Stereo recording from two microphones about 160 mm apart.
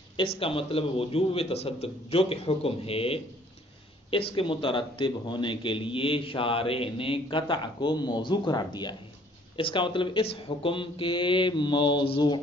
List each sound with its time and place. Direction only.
0.4 s a man's voice: 35° left (ahead or behind)